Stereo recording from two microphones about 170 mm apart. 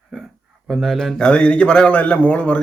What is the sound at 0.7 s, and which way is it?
A man's voice, centre (ahead or behind).